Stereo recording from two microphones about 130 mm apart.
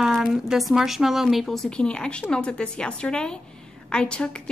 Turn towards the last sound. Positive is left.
turn(degrees=5)  # may be behind; listen again after turning